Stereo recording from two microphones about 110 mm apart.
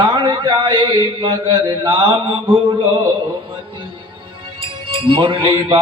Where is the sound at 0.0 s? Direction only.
45° right (ahead or behind).